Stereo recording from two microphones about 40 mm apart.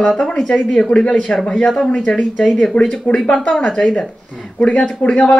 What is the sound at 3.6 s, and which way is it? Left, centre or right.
Speech, left.